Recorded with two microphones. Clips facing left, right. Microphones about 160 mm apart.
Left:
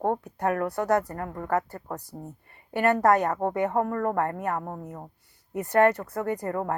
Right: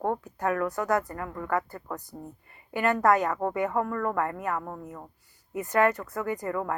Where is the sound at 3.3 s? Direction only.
35° left (ahead or behind).